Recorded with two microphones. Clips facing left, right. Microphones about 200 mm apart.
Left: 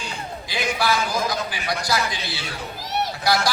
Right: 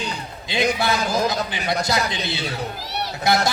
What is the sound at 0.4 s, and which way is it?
A man's voice, 25° right (ahead or behind).